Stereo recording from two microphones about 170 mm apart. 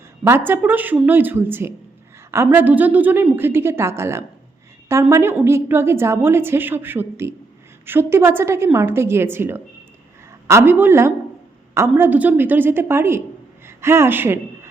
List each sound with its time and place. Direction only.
0.3 s a woman's voice: 10° right (ahead or behind)